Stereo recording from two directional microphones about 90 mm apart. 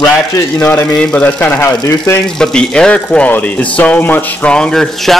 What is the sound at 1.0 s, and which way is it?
Speech, 10° left (ahead or behind).